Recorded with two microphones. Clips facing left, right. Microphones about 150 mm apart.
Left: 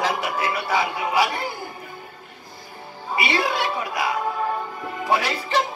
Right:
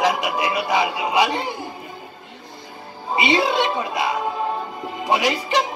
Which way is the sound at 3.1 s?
20° right (ahead or behind).